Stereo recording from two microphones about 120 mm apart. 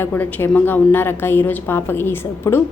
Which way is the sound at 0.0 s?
15° left (ahead or behind).